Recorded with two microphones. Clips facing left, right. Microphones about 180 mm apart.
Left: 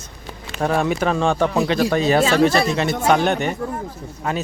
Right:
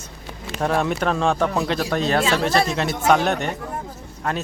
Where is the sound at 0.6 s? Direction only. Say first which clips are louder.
Left 2 dB; centre (ahead or behind).